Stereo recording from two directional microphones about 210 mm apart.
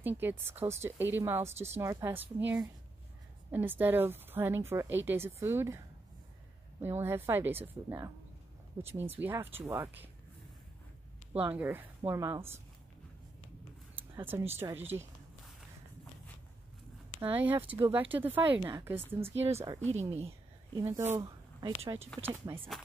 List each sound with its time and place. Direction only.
0.0 s speech: 10° right (ahead or behind)
6.8 s speech: 10° right (ahead or behind)
11.5 s speech: 10° right (ahead or behind)
14.1 s speech: 10° right (ahead or behind)
17.2 s speech: 10° right (ahead or behind)
19.9 s speech: 30° right (ahead or behind)
20.7 s speech: 10° right (ahead or behind)